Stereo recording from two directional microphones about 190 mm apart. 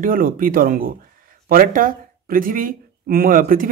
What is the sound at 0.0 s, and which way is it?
Speech, 45° right (ahead or behind).